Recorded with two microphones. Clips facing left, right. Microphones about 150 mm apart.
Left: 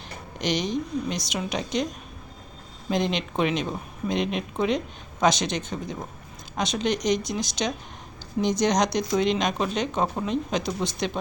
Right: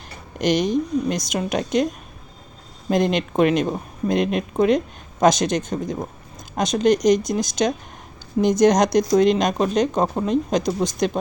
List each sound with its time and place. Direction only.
0.3 s speech: 50° right (ahead or behind)
2.9 s speech: 50° right (ahead or behind)